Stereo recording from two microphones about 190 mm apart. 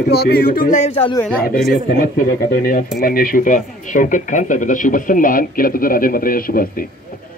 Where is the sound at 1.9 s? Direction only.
50° left (ahead or behind).